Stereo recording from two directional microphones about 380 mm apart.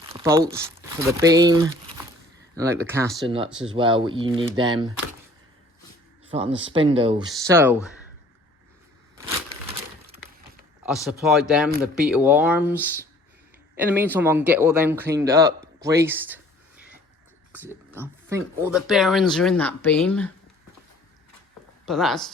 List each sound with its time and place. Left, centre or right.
0.1 s crumpling: centre
0.4 s speech: centre
6.3 s speech: centre
9.1 s a sound: centre
10.8 s speech: centre
17.5 s speech: centre
21.8 s speech: centre